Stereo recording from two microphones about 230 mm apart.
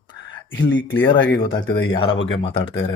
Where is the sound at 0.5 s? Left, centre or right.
Left.